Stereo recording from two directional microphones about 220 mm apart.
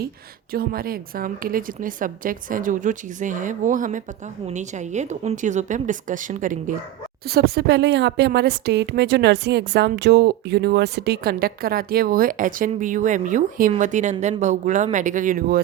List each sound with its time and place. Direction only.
0.5 s a woman's voice: 40° right (ahead or behind)